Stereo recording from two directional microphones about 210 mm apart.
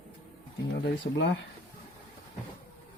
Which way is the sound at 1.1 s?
60° left (ahead or behind).